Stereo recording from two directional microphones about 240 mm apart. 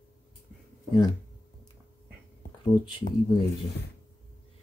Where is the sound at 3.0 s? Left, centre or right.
Left.